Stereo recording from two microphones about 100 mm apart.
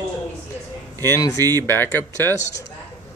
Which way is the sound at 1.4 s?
25° left (ahead or behind).